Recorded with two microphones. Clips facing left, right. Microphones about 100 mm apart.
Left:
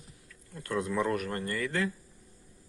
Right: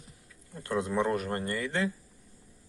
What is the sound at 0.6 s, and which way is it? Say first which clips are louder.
Speech: right 1 dB; 25° right (ahead or behind).